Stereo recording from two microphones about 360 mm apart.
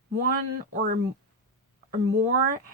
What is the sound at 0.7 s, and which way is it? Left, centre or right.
Speech, right.